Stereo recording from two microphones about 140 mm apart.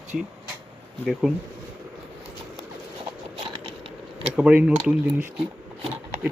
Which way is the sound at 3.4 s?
40° right (ahead or behind).